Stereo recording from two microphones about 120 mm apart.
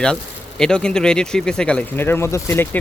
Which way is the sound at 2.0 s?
20° left (ahead or behind).